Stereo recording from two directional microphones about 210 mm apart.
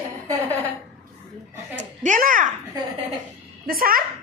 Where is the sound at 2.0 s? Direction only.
40° right (ahead or behind).